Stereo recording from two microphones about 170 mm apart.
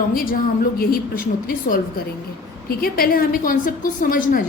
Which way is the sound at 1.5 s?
55° left (ahead or behind).